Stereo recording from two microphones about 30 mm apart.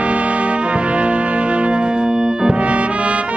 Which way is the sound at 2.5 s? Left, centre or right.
Right.